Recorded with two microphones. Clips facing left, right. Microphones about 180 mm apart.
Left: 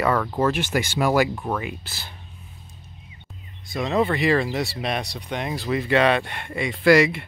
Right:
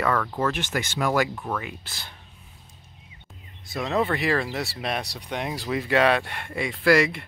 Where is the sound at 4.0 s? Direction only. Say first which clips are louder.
Left 4 dB; centre (ahead or behind).